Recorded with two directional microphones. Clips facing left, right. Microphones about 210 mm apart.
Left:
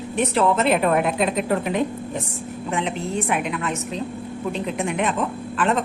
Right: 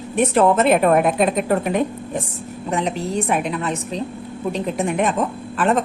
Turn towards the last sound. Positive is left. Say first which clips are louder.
# right 3 dB
turn(degrees=-45)  # may be behind; listen again after turning